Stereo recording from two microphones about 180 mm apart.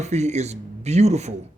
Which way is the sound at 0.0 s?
40° right (ahead or behind).